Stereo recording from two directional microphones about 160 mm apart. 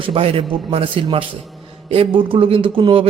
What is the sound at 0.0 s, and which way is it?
A man's voice, 35° right (ahead or behind).